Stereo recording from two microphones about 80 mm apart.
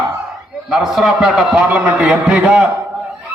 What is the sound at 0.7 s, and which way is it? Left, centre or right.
A man's voice, centre.